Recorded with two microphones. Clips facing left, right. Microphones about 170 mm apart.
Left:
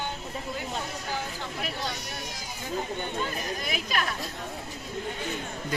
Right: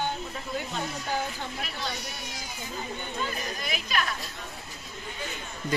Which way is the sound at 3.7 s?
45° left (ahead or behind).